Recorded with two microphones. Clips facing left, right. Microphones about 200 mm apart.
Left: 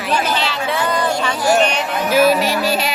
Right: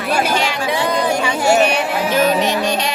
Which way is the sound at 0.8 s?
15° right (ahead or behind).